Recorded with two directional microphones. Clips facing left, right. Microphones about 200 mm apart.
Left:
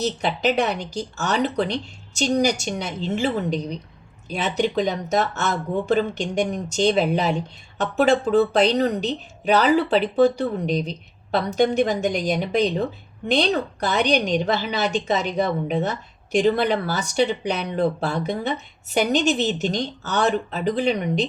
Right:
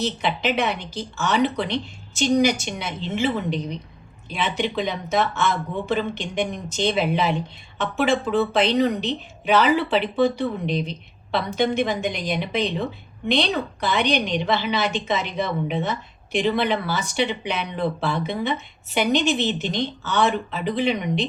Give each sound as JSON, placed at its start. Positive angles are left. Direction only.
{"t": 0.0, "sound": "a woman's voice", "side_deg": 40}